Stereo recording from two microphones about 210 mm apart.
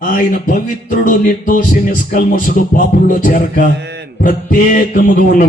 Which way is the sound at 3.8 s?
55° right (ahead or behind).